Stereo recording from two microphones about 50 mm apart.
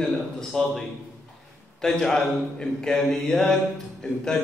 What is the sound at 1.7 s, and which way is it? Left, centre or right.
A man's voice, centre.